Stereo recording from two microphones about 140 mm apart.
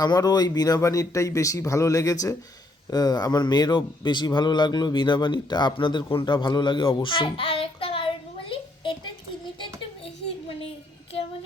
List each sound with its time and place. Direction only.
0.0 s speech: 30° left (ahead or behind)